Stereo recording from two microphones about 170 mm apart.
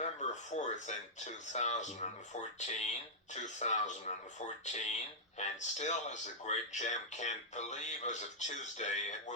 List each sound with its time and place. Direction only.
0.0 s speech: 45° left (ahead or behind)